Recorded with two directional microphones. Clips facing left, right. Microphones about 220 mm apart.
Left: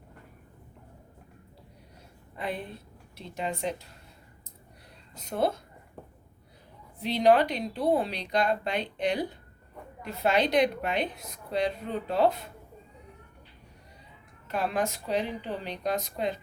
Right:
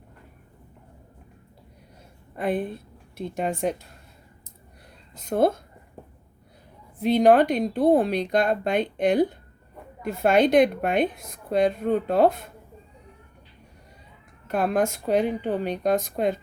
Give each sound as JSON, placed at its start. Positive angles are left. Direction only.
{"t": 2.3, "sound": "a woman's voice", "side_deg": -50}
{"t": 5.1, "sound": "a woman's voice", "side_deg": -50}
{"t": 7.0, "sound": "a woman's voice", "side_deg": -50}
{"t": 14.4, "sound": "a woman's voice", "side_deg": -50}